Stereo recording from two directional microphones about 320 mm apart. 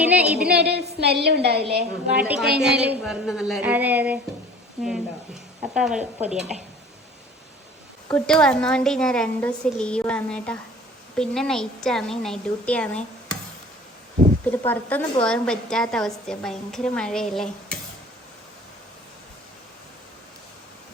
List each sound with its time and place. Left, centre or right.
0.0 s a woman's voice: centre
0.5 s a woman's voice: right
2.1 s a woman's voice: centre
8.0 s a woman's voice: centre
14.7 s a woman's voice: centre